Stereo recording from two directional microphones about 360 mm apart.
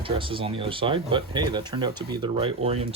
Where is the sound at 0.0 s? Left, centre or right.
Centre.